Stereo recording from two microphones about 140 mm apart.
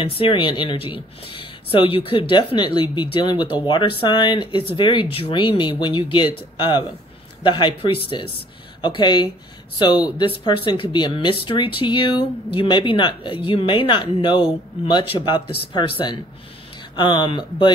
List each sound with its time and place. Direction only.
0.0 s speech: 40° left (ahead or behind)